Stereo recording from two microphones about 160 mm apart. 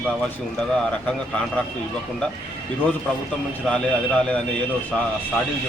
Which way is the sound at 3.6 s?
5° left (ahead or behind).